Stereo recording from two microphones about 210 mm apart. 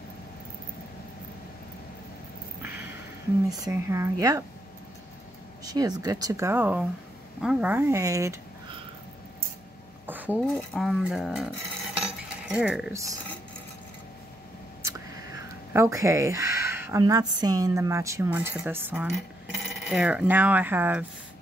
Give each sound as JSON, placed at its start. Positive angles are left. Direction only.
{"t": 2.6, "sound": "a sound", "side_deg": -10}
{"t": 3.4, "sound": "speech", "side_deg": -15}
{"t": 5.7, "sound": "speech", "side_deg": -20}
{"t": 10.0, "sound": "a sound", "side_deg": -10}
{"t": 10.4, "sound": "speech", "side_deg": 0}
{"t": 15.7, "sound": "speech", "side_deg": -15}